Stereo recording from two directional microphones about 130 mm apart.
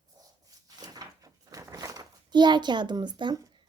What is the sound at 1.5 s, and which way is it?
Speech, 25° right (ahead or behind).